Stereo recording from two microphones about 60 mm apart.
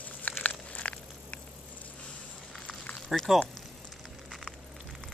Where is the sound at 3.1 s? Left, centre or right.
Centre.